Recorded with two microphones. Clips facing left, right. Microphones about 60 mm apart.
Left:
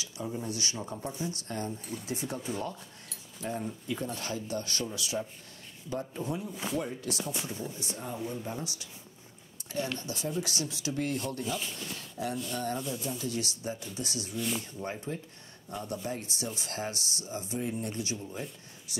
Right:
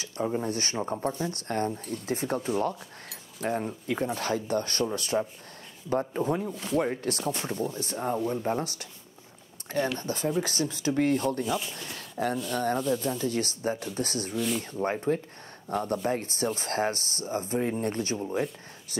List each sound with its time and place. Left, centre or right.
0.0 s speech: right
3.4 s speech: right
6.5 s speech: centre
6.8 s speech: right
7.2 s speech: centre
7.6 s speech: right
9.9 s speech: right
11.4 s speech: centre
11.8 s speech: right
14.3 s speech: centre
14.6 s speech: right
18.3 s speech: right